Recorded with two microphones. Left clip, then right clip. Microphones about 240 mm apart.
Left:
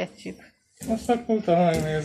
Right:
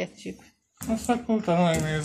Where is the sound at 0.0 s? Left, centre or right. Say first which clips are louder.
Left 1 dB; centre.